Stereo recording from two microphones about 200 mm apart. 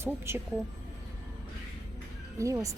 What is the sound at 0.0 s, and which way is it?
Speech, 10° right (ahead or behind).